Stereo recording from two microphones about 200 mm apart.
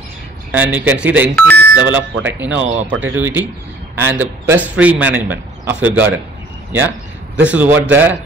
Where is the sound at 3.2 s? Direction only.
10° right (ahead or behind).